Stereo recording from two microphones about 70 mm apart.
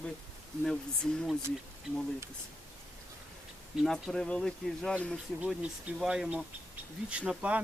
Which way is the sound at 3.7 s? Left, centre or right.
Centre.